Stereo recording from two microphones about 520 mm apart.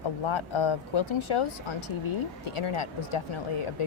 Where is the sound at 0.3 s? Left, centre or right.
Left.